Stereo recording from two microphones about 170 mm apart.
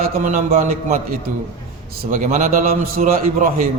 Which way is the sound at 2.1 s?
45° right (ahead or behind).